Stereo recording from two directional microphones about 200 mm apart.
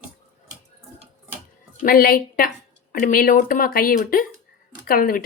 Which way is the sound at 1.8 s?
45° left (ahead or behind).